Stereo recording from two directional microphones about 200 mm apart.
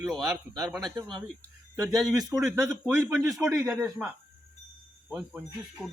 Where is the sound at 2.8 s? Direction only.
15° right (ahead or behind).